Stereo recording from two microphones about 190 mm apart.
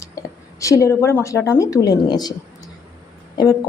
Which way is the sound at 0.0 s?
15° left (ahead or behind).